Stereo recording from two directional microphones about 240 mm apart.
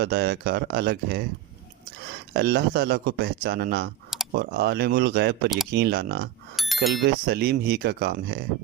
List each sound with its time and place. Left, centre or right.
0.0 s speech: right
2.3 s speech: right
6.6 s bicycle bell: centre
6.9 s speech: right